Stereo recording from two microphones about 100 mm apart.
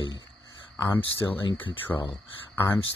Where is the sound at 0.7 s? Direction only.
25° left (ahead or behind).